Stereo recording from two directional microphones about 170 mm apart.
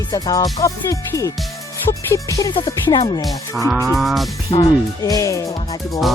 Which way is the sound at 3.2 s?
Centre (ahead or behind).